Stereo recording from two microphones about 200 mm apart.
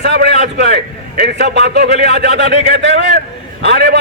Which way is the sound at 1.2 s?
55° right (ahead or behind).